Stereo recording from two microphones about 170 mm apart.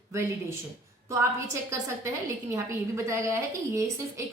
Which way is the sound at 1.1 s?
20° right (ahead or behind).